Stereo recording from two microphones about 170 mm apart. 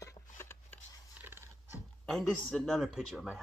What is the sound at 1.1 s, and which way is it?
Dog, 15° right (ahead or behind).